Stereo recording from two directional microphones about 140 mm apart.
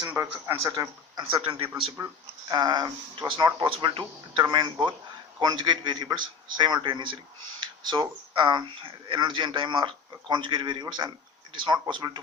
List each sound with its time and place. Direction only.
0.4 s speech: 20° right (ahead or behind)
1.3 s speech: 40° right (ahead or behind)
2.5 s speech: 30° right (ahead or behind)
7.6 s a sound: 30° right (ahead or behind)
8.4 s speech: 30° right (ahead or behind)